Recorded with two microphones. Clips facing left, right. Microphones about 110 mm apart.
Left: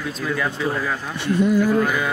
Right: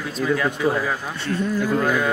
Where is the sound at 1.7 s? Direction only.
5° left (ahead or behind).